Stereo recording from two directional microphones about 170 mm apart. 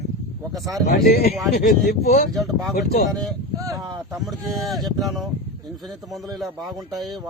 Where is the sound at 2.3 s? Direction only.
Centre (ahead or behind).